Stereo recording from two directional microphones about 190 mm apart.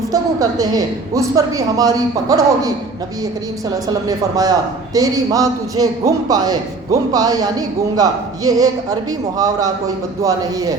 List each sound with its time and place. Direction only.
0.1 s a woman's voice: 20° right (ahead or behind)
4.0 s a woman's voice: 20° right (ahead or behind)